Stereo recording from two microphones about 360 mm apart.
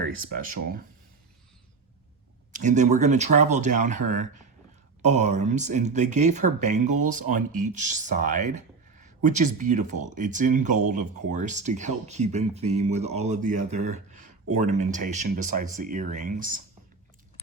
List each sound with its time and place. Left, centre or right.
0.0 s speech: right
2.5 s speech: right